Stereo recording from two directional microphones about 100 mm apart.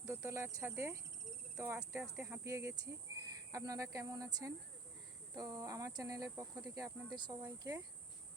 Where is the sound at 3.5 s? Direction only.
35° right (ahead or behind).